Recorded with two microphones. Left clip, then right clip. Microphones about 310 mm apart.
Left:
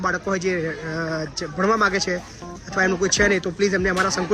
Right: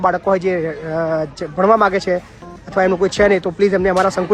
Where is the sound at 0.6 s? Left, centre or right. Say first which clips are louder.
Right 5 dB; right.